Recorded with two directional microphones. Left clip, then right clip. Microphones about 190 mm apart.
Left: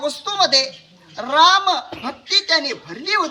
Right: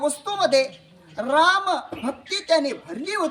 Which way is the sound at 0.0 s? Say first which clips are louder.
Left 3 dB; 65° right (ahead or behind).